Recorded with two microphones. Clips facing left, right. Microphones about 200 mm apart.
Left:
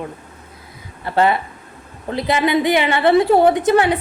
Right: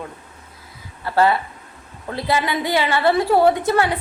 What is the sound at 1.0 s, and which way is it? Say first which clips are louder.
A woman's voice: left 1 dB; 20° left (ahead or behind).